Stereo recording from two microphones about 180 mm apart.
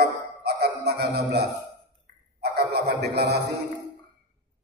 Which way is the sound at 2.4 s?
65° right (ahead or behind).